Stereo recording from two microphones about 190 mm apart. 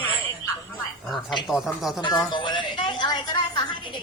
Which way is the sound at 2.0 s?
25° left (ahead or behind).